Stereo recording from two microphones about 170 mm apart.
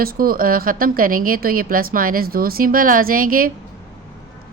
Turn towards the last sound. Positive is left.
turn(degrees=-55)  # may be behind; listen again after turning